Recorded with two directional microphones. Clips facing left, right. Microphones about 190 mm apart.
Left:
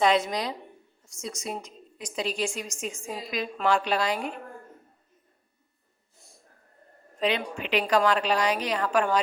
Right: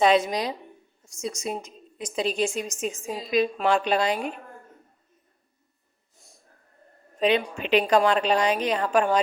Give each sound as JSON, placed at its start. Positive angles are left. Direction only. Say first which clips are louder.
{"t": 0.0, "sound": "a woman's voice", "louder": "right 3 dB", "side_deg": -20}
{"t": 7.2, "sound": "a woman's voice", "louder": "right 5 dB", "side_deg": -20}